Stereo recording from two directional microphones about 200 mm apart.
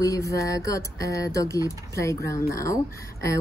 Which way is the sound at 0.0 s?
15° left (ahead or behind).